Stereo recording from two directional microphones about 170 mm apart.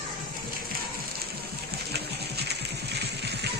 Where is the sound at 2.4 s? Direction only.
75° right (ahead or behind).